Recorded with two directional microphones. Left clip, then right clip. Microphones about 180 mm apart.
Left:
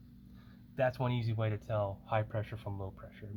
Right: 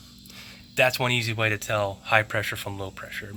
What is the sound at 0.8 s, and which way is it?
Speech, 10° right (ahead or behind).